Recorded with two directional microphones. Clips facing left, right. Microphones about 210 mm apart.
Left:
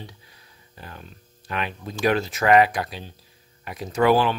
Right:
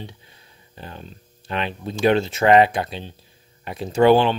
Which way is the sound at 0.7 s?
25° right (ahead or behind).